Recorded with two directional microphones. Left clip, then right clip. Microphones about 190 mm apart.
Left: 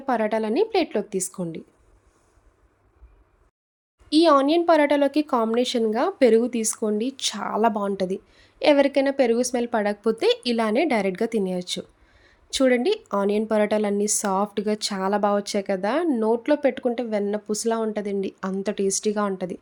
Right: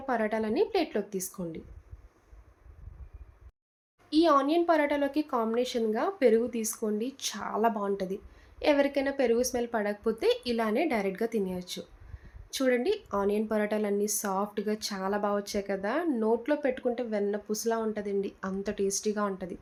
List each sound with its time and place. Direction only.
0.0 s a woman's voice: 50° left (ahead or behind)
4.1 s a woman's voice: 60° left (ahead or behind)